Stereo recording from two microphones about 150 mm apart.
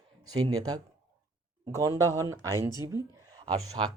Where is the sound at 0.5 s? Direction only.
25° right (ahead or behind).